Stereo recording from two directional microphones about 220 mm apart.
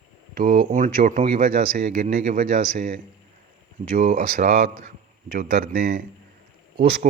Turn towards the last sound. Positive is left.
turn(degrees=-25)  # may be behind; listen again after turning